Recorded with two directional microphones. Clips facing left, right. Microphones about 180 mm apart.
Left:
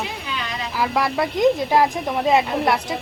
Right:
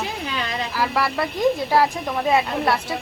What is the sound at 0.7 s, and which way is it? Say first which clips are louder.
Speech: left 2 dB; 15° left (ahead or behind).